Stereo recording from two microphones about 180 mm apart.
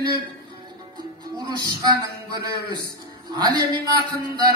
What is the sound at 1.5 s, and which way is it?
Music, 25° right (ahead or behind).